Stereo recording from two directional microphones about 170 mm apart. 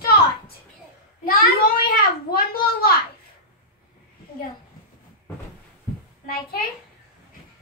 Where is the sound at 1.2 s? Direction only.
60° left (ahead or behind).